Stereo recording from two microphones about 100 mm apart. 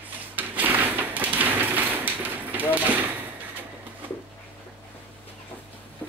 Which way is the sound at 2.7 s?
15° right (ahead or behind).